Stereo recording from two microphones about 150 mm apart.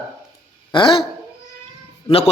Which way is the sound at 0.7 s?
35° left (ahead or behind).